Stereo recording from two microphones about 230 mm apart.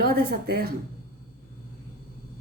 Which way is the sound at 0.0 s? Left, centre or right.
Right.